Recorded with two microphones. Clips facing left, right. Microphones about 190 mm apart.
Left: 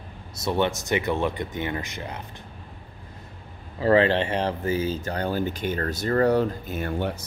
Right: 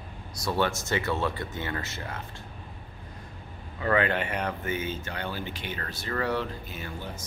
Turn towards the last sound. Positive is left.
turn(degrees=65)  # may be behind; listen again after turning